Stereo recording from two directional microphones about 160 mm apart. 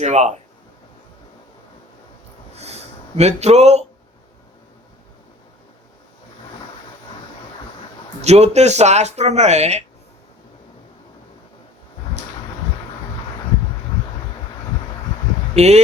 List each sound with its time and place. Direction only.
0.0 s speech: 45° right (ahead or behind)
2.6 s speech: 40° right (ahead or behind)
8.2 s speech: 45° right (ahead or behind)
15.5 s speech: 45° right (ahead or behind)